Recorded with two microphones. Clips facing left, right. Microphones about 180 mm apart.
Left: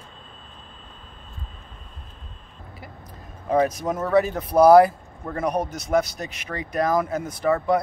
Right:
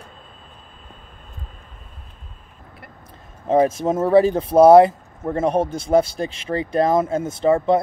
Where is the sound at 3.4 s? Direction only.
25° right (ahead or behind).